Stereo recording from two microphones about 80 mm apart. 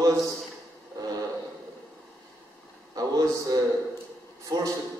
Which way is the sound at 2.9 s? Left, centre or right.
Right.